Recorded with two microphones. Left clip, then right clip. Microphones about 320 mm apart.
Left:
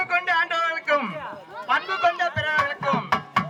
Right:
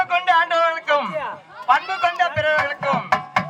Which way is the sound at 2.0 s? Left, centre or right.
Centre.